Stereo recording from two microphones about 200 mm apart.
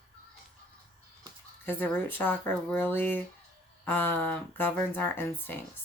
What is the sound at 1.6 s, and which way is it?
Speech, 10° left (ahead or behind).